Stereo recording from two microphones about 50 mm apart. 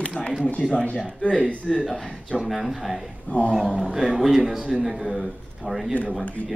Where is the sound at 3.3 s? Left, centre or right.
Left.